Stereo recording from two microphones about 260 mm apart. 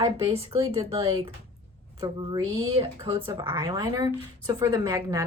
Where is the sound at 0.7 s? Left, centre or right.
Right.